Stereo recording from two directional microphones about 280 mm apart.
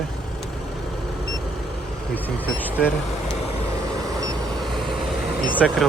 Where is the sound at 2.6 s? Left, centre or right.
Centre.